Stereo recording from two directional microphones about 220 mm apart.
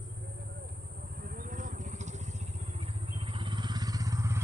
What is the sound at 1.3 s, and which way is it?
Vehicle, 40° right (ahead or behind).